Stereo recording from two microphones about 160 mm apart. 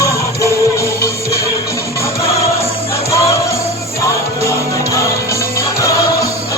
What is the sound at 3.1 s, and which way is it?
Music, 20° left (ahead or behind).